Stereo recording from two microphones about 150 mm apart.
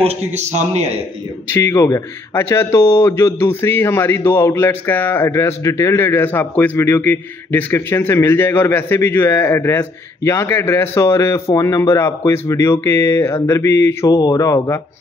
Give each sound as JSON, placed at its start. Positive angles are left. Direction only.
{"t": 0.0, "sound": "a man's voice", "side_deg": -45}
{"t": 1.5, "sound": "a man's voice", "side_deg": 20}